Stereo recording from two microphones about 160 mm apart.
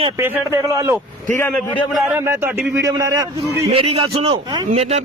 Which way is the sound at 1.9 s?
5° right (ahead or behind).